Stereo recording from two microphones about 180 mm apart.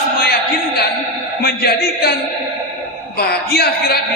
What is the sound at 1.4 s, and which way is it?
Speech, 60° left (ahead or behind).